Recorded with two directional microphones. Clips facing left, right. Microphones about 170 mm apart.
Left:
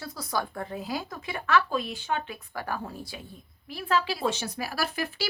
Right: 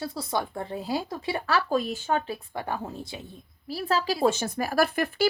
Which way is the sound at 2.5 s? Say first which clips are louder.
Even; 20° right (ahead or behind).